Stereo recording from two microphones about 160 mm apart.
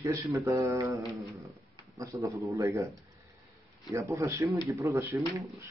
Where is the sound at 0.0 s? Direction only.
20° right (ahead or behind).